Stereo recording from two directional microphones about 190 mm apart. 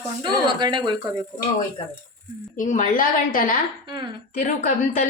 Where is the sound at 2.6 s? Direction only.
40° left (ahead or behind).